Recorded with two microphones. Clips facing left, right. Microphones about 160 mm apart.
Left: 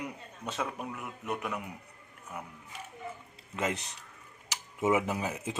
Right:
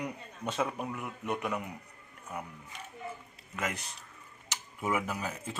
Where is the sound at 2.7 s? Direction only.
5° left (ahead or behind).